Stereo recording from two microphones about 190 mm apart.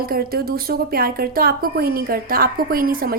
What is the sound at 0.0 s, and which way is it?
Speech, 50° right (ahead or behind).